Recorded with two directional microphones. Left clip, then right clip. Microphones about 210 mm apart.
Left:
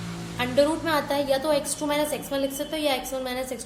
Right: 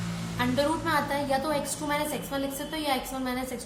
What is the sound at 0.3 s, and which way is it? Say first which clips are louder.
A woman's voice: left 5 dB; 35° left (ahead or behind).